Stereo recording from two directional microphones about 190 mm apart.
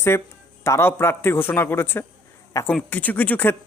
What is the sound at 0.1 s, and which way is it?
Speech, 15° left (ahead or behind).